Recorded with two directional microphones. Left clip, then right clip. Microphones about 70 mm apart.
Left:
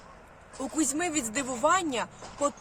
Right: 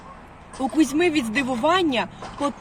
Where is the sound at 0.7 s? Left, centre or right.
Left.